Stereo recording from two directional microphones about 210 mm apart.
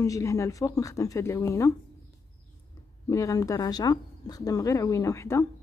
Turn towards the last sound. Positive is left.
turn(degrees=15)  # may be behind; listen again after turning